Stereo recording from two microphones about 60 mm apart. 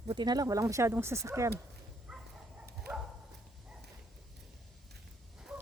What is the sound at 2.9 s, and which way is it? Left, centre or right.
Dog, right.